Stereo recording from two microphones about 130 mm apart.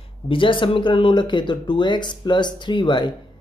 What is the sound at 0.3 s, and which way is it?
Speech, 40° left (ahead or behind).